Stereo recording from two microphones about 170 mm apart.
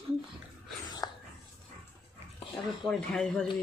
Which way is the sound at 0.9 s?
25° left (ahead or behind).